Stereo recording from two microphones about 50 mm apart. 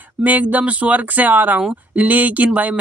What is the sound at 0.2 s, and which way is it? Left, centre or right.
Speech, right.